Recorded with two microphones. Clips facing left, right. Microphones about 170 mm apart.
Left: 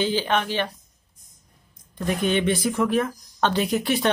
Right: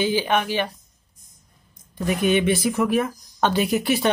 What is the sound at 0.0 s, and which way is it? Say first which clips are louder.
Speech: right 2 dB; 10° right (ahead or behind).